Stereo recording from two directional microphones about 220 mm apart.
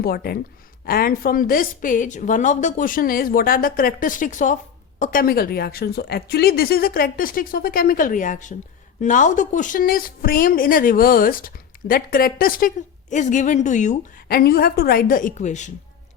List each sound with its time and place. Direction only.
0.0 s a woman's voice: 45° left (ahead or behind)